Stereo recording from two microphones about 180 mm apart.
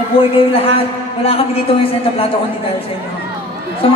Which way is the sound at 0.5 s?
30° left (ahead or behind).